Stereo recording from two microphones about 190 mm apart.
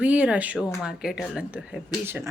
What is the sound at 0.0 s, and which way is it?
Speech, 5° right (ahead or behind).